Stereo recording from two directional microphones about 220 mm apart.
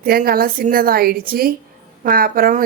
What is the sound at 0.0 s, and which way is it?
A woman's voice, 45° right (ahead or behind).